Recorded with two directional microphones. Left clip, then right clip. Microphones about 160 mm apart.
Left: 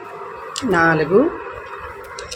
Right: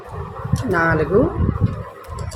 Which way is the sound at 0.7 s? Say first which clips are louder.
Left 2 dB; 20° left (ahead or behind).